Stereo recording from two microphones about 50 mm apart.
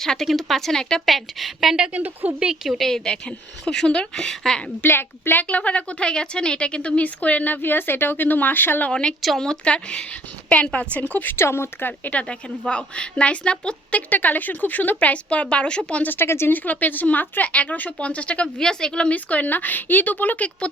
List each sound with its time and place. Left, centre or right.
0.0 s speech: centre
1.0 s speech: centre
1.9 s speech: right
2.6 s speech: centre
4.8 s a woman's voice: left
5.5 s speech: left
8.9 s a woman's voice: left
11.3 s speech: left
12.1 s a woman's voice: left
16.0 s speech: left
16.5 s a woman's voice: left; by 19.1 s centre
19.1 s speech: left